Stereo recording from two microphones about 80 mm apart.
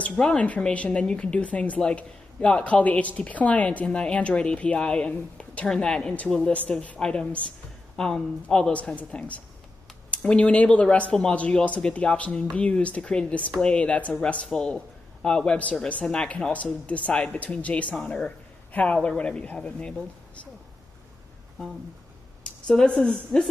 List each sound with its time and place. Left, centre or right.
0.0 s a man's voice: centre
22.7 s speech: centre